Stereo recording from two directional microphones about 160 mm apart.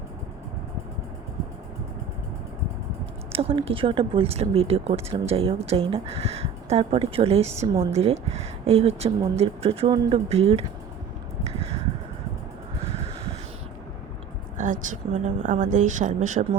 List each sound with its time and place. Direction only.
3.3 s speech: 35° right (ahead or behind)
14.6 s a woman's voice: 55° right (ahead or behind)